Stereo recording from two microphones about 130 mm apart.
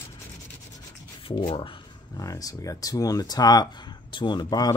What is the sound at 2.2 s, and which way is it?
Speech, 25° left (ahead or behind).